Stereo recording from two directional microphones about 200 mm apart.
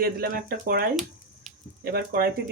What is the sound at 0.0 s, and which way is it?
Speech, 50° right (ahead or behind).